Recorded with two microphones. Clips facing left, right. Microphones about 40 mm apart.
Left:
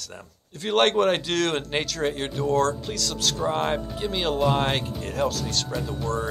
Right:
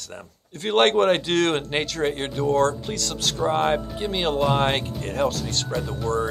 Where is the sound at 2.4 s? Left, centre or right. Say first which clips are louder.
Right 2 dB; right.